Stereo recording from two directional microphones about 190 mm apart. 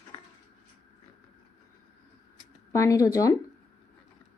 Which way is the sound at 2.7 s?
15° left (ahead or behind).